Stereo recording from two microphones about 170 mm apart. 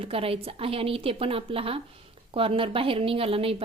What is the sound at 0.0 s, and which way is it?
A woman's voice, 35° right (ahead or behind).